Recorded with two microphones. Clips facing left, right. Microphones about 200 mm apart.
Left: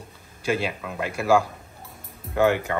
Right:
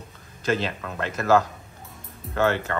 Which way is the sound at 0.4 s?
10° left (ahead or behind).